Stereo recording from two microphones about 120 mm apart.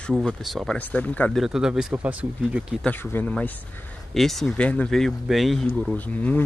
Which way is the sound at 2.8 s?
10° left (ahead or behind).